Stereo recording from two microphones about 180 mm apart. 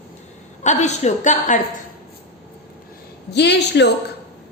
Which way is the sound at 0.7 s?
40° left (ahead or behind).